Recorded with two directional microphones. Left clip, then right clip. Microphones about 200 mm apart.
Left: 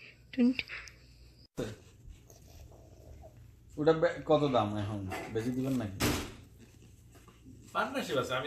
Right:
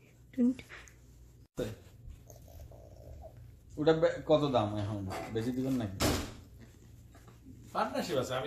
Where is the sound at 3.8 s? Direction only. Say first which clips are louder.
Even; 35° left (ahead or behind).